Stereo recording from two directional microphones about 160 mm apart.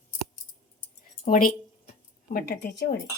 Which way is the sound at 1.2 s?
60° left (ahead or behind).